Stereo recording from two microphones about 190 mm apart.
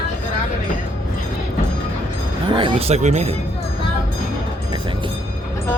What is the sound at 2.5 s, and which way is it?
Speech, 25° right (ahead or behind).